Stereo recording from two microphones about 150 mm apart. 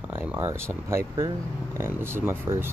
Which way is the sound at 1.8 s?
15° right (ahead or behind).